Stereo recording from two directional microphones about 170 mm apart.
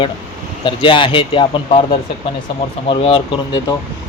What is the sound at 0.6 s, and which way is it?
Speech, 30° left (ahead or behind).